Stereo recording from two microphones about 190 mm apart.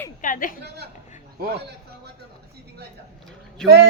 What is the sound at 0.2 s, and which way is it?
Speech, 45° left (ahead or behind).